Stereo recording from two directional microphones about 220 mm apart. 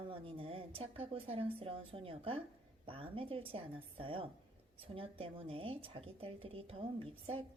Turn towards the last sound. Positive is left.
turn(degrees=-25)  # may be behind; listen again after turning